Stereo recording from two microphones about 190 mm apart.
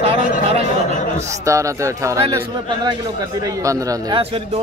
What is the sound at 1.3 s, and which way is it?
A man's voice, 15° right (ahead or behind).